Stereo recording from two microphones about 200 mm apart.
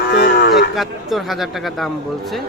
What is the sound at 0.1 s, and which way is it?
Cattle, 55° left (ahead or behind).